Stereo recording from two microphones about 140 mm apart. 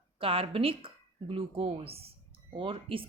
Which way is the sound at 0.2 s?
40° right (ahead or behind).